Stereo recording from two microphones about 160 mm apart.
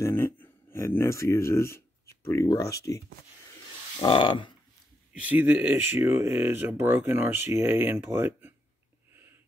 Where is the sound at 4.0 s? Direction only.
30° left (ahead or behind).